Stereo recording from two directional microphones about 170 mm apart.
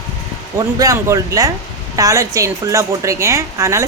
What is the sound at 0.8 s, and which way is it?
A woman's voice, 20° right (ahead or behind).